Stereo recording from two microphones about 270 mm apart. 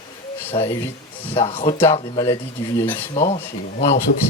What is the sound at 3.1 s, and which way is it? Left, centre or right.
Speech, left.